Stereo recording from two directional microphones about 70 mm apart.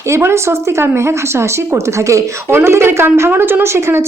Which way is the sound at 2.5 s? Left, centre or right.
Right.